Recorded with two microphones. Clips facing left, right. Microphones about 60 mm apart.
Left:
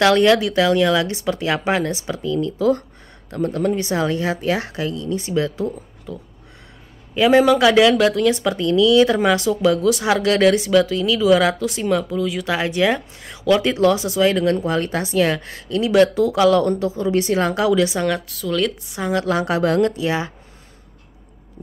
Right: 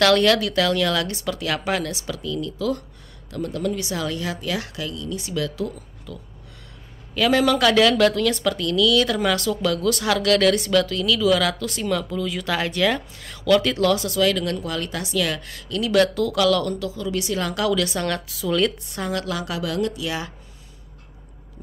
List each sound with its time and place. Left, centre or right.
0.0 s speech: centre
7.2 s speech: left; by 12.5 s centre
12.5 s speech: centre
18.2 s speech: centre
18.9 s speech: centre
19.1 s speech: left